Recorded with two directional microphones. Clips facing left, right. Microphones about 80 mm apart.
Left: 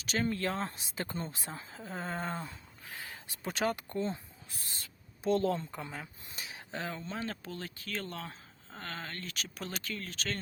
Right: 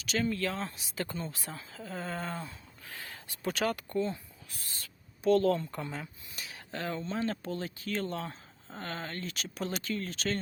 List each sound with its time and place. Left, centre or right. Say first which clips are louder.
0.0 s speech: right 1 dB; left
2.4 s speech: even; centre
6.3 s a sound: even; left
6.8 s speech: right 6 dB; centre